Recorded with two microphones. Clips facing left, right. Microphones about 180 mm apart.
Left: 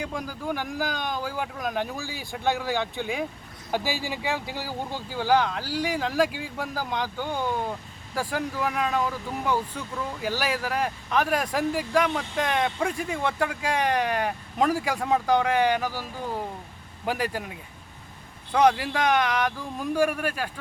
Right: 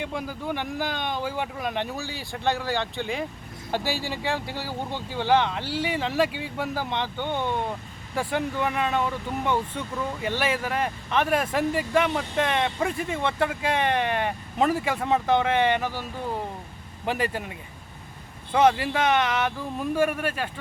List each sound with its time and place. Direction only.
0.0 s speech: 5° right (ahead or behind)
17.1 s speech: 5° left (ahead or behind)